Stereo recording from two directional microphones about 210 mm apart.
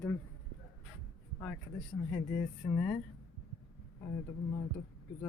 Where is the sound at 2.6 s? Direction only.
10° left (ahead or behind).